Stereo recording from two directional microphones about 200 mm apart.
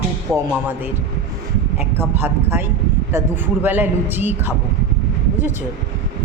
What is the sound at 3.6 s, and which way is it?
Speech, 10° right (ahead or behind).